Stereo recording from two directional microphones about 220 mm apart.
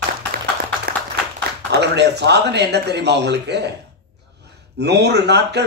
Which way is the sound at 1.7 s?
50° right (ahead or behind).